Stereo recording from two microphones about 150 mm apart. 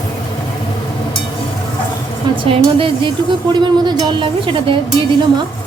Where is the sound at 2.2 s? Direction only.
30° right (ahead or behind).